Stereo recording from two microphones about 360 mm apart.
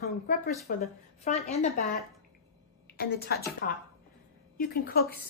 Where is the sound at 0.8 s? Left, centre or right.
Centre.